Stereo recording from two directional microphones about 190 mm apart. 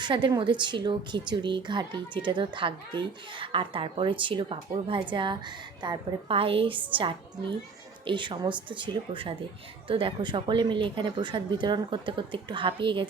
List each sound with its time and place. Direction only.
0.0 s speech: 25° right (ahead or behind)